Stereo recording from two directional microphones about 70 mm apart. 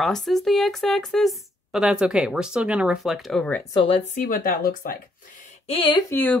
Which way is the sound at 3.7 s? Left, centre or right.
Left.